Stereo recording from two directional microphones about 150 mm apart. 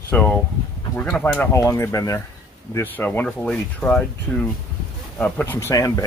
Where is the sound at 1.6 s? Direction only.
20° left (ahead or behind).